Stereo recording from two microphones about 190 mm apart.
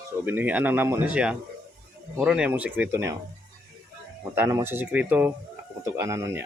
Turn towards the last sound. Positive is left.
turn(degrees=-15)  # may be behind; listen again after turning